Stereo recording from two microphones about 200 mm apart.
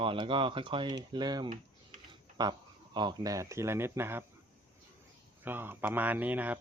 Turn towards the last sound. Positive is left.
turn(degrees=-10)  # may be behind; listen again after turning